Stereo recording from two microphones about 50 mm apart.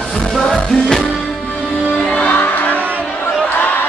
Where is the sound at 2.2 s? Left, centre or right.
Left.